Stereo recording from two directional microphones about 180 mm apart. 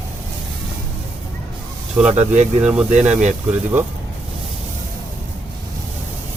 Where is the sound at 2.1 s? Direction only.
40° right (ahead or behind).